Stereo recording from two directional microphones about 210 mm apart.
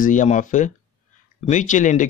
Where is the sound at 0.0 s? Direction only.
35° left (ahead or behind).